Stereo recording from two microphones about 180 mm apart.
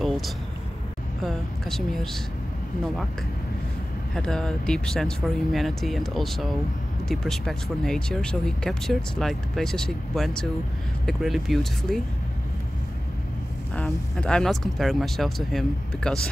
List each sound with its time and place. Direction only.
1.2 s a woman's voice: centre (ahead or behind)
4.1 s speech: 5° left (ahead or behind)
13.7 s speech: 5° left (ahead or behind)